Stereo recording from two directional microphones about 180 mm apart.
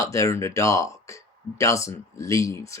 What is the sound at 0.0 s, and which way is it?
Speech, 15° left (ahead or behind).